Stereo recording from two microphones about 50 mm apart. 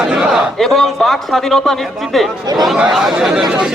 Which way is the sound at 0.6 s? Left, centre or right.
Centre.